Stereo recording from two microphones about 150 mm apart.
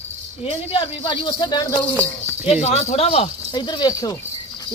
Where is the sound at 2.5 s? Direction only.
45° left (ahead or behind).